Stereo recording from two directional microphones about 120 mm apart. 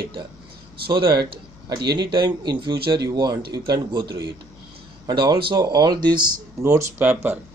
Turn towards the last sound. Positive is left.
turn(degrees=-15)  # may be behind; listen again after turning